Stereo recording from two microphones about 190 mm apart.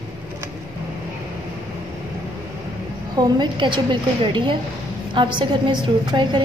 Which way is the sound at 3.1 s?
20° right (ahead or behind).